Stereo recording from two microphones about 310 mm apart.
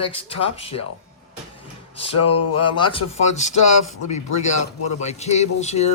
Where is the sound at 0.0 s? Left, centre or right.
Centre.